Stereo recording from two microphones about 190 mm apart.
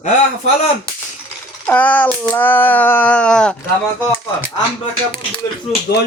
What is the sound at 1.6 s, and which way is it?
Speech, 10° left (ahead or behind).